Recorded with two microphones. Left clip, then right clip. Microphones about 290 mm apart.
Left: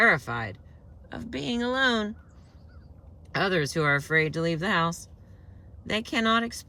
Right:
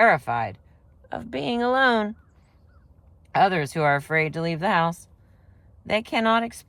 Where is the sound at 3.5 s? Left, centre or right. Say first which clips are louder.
Right 3 dB; centre.